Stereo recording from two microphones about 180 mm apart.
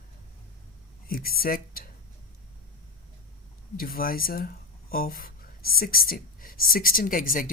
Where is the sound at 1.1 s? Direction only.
55° left (ahead or behind).